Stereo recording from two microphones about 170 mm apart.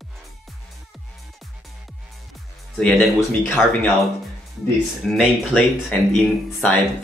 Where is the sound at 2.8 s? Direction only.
5° left (ahead or behind).